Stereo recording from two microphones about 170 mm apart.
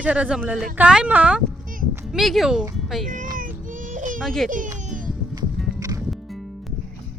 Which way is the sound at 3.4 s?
50° right (ahead or behind).